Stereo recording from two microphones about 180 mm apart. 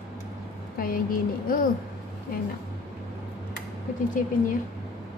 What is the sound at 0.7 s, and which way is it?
Speech, 50° left (ahead or behind).